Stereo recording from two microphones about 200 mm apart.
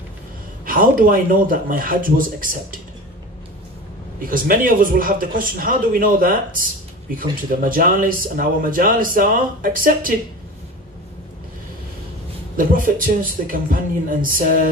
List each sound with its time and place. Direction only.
0.7 s speech: 45° right (ahead or behind)
4.2 s speech: 45° right (ahead or behind)
12.5 s speech: 45° right (ahead or behind)